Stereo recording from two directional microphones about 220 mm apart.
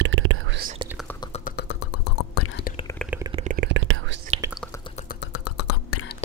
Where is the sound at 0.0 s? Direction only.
65° right (ahead or behind).